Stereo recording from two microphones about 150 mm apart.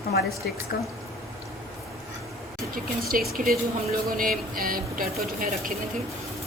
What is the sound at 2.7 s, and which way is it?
Speech, 75° right (ahead or behind).